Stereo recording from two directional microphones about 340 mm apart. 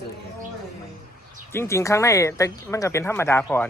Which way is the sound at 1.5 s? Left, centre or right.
Centre.